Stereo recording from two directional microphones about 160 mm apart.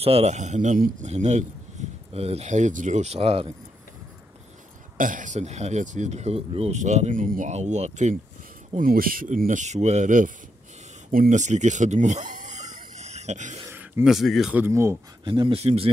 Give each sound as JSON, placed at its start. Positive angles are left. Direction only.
{"t": 0.0, "sound": "speech", "side_deg": -40}
{"t": 1.0, "sound": "speech", "side_deg": -45}
{"t": 1.8, "sound": "a sound", "side_deg": -50}
{"t": 2.1, "sound": "speech", "side_deg": -40}
{"t": 4.9, "sound": "speech", "side_deg": -55}
{"t": 8.7, "sound": "speech", "side_deg": -65}
{"t": 13.7, "sound": "a sound", "side_deg": -15}
{"t": 14.0, "sound": "speech", "side_deg": 0}
{"t": 14.6, "sound": "speech", "side_deg": -15}
{"t": 15.2, "sound": "speech", "side_deg": -30}